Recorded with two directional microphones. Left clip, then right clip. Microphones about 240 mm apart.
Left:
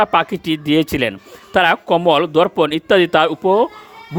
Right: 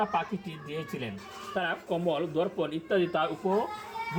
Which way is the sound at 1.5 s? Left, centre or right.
Left.